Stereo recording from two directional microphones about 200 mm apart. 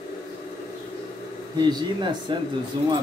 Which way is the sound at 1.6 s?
20° right (ahead or behind).